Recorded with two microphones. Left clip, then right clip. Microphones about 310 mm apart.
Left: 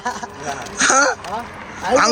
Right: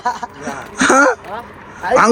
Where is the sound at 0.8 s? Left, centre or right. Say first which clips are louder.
Right 3 dB; centre.